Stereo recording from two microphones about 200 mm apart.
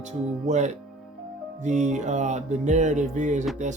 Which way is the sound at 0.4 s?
35° right (ahead or behind).